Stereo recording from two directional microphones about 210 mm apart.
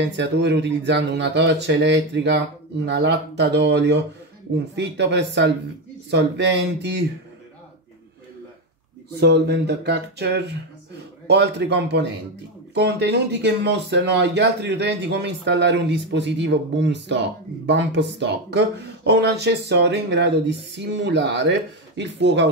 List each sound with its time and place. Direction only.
0.0 s speech: 55° right (ahead or behind)
9.2 s a man's voice: 50° right (ahead or behind)